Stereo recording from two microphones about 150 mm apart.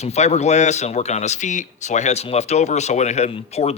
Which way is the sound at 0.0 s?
45° left (ahead or behind).